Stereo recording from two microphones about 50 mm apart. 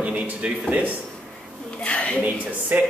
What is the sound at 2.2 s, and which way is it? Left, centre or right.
Speech, right.